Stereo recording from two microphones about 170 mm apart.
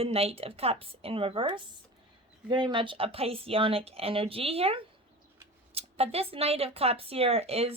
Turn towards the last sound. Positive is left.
turn(degrees=-35)  # may be behind; listen again after turning